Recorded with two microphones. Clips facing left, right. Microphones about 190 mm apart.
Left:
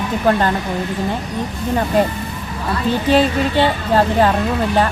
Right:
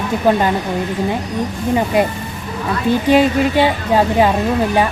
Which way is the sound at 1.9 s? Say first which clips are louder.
Even; 10° right (ahead or behind).